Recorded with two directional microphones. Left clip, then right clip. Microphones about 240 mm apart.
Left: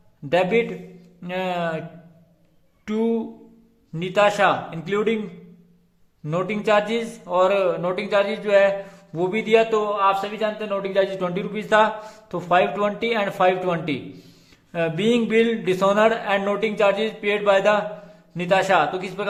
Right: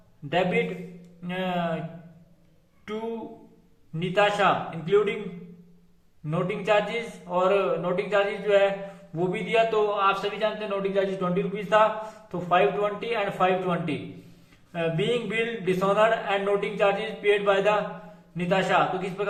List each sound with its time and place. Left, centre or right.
0.3 s a man's voice: left
3.9 s a man's voice: left
6.2 s a man's voice: left